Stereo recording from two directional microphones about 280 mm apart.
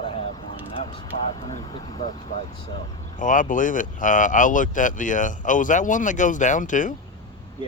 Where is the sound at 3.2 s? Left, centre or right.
Left.